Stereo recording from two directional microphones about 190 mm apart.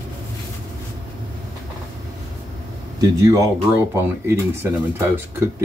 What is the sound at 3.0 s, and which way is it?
Speech, 15° right (ahead or behind).